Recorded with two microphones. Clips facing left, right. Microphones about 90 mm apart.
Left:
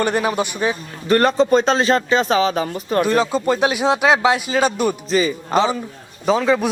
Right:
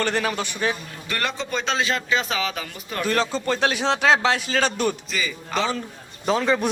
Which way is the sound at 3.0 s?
15° left (ahead or behind).